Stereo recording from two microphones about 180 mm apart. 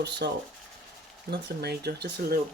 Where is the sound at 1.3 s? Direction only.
65° right (ahead or behind).